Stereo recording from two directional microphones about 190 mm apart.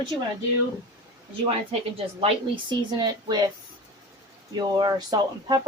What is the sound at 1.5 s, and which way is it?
A woman's voice, 30° right (ahead or behind).